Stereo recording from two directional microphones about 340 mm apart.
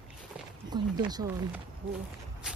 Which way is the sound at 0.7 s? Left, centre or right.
Centre.